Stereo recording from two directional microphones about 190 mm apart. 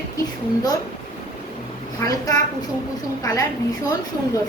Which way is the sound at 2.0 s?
20° left (ahead or behind).